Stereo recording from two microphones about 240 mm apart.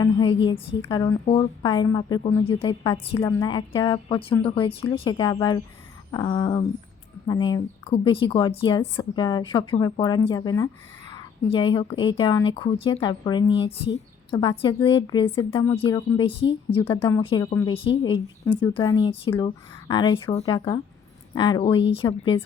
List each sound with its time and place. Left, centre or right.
0.0 s a woman's voice: centre